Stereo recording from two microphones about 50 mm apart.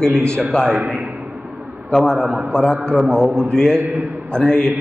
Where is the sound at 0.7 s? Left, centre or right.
Right.